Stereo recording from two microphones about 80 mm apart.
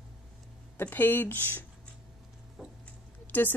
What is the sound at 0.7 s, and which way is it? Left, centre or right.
Speech, left.